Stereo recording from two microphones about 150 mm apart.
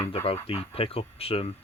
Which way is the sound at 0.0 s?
40° left (ahead or behind).